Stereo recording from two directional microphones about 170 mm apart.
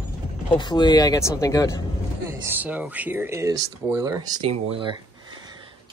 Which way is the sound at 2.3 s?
10° right (ahead or behind).